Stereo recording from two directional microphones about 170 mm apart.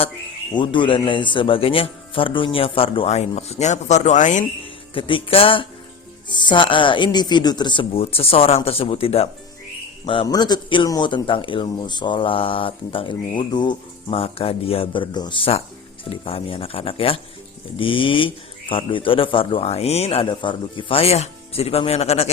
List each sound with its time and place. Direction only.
0.5 s a man's voice: 30° left (ahead or behind); by 4.4 s 45° left (ahead or behind)
4.9 s a man's voice: 30° left (ahead or behind)